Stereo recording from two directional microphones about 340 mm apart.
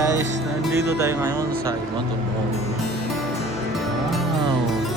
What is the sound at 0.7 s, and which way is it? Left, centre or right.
Speech, centre.